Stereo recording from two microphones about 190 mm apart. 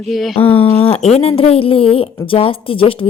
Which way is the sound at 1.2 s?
30° left (ahead or behind).